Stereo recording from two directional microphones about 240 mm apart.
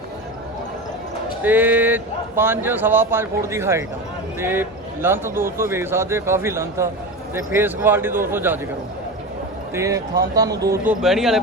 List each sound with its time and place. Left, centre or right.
1.4 s speech: centre
9.7 s speech: centre
11.0 s a man's voice: centre